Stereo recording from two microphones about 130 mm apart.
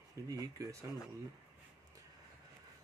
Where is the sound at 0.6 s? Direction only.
25° right (ahead or behind).